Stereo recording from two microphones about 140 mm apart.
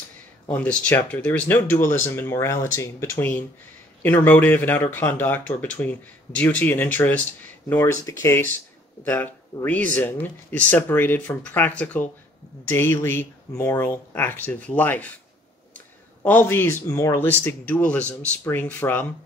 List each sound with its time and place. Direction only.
0.5 s speech: 10° left (ahead or behind)
16.2 s speech: 15° left (ahead or behind)